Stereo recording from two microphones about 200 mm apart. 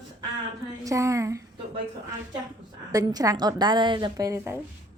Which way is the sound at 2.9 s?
20° right (ahead or behind).